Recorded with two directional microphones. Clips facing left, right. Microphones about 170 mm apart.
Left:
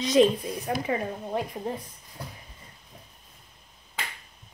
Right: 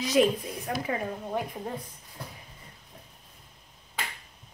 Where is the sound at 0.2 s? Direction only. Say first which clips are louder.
Left 3 dB; 30° left (ahead or behind).